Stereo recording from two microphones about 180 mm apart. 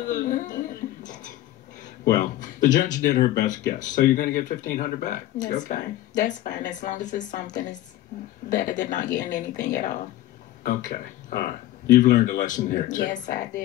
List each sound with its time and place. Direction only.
0.0 s speech: 45° left (ahead or behind)
1.0 s a sound: 45° left (ahead or behind)
2.0 s speech: 45° left (ahead or behind)